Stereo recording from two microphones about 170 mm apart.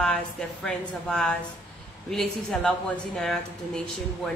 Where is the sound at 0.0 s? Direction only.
5° left (ahead or behind).